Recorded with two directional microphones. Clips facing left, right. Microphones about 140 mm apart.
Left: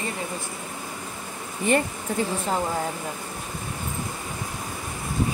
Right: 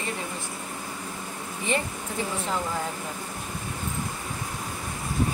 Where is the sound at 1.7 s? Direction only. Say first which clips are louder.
Left 6 dB; 50° left (ahead or behind).